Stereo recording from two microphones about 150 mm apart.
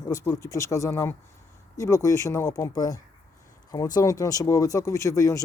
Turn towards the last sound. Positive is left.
turn(degrees=20)  # may be behind; listen again after turning